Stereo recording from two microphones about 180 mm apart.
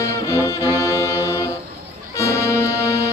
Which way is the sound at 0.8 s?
15° left (ahead or behind).